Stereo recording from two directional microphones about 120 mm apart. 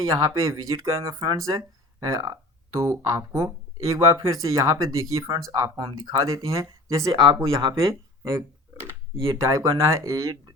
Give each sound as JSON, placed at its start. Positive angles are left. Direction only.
{"t": 0.0, "sound": "speech", "side_deg": -30}
{"t": 7.1, "sound": "speech", "side_deg": -45}
{"t": 7.9, "sound": "a sound", "side_deg": -25}
{"t": 9.2, "sound": "speech", "side_deg": -30}